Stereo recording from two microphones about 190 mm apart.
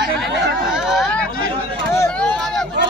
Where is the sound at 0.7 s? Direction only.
Centre (ahead or behind).